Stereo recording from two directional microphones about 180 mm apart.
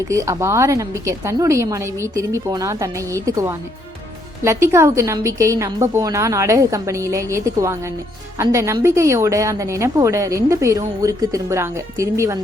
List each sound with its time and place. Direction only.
0.1 s a woman's voice: 15° right (ahead or behind)